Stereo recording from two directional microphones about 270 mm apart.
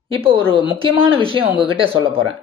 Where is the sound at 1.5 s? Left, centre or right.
Centre.